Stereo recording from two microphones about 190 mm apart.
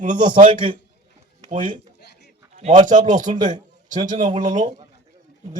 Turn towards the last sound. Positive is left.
turn(degrees=-40)  # may be behind; listen again after turning